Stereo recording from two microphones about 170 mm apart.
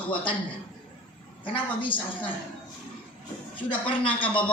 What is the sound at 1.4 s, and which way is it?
Speech, 30° left (ahead or behind).